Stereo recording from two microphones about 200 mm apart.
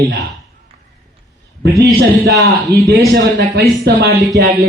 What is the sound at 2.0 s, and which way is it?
A man's voice, 50° right (ahead or behind).